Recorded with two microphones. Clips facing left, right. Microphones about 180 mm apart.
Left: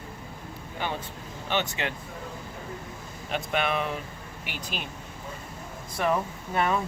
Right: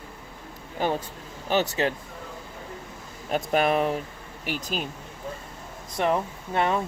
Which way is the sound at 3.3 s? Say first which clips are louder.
Right 5 dB; 40° right (ahead or behind).